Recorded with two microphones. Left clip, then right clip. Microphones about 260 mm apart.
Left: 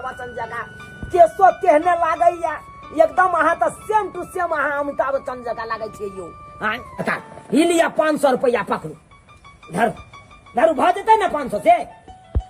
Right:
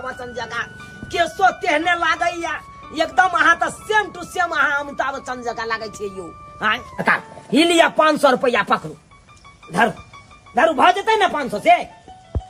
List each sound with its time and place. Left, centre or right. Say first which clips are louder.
0.8 s music: left 9 dB; centre
1.6 s a woman's voice: left 2 dB; left
4.4 s music: right 2 dB; left
5.9 s speech: right 1 dB; centre